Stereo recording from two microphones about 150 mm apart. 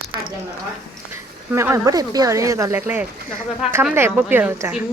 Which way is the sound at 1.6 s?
20° right (ahead or behind).